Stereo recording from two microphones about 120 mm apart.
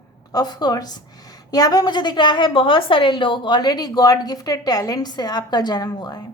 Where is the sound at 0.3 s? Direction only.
35° left (ahead or behind).